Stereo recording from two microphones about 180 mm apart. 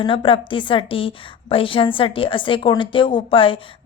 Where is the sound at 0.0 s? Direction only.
30° left (ahead or behind).